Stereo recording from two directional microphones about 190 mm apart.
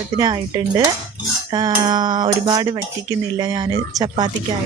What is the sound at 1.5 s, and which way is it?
Speech, 20° right (ahead or behind).